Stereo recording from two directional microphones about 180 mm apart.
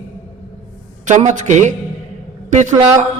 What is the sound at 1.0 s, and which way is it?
A man's voice, 40° right (ahead or behind).